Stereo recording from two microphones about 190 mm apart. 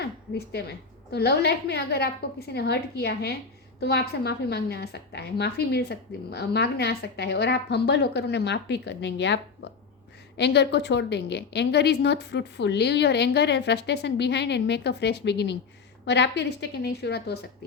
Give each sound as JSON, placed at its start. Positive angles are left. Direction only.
{"t": 0.0, "sound": "a woman's voice", "side_deg": 60}